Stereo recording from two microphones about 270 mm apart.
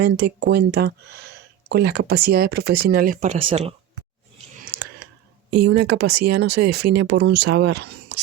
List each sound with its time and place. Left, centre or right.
0.0 s speech: right
5.5 s speech: right